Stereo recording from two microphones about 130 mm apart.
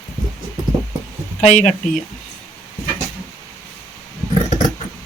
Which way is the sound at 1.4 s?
60° left (ahead or behind).